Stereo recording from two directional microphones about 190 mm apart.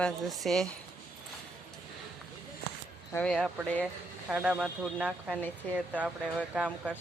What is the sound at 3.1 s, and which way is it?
Speech, 5° left (ahead or behind).